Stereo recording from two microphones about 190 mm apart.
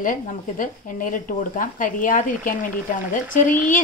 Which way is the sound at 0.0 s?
45° left (ahead or behind).